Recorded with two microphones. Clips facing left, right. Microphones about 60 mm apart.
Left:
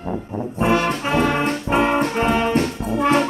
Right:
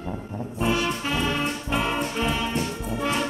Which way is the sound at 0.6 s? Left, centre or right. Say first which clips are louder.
Left 6 dB; left.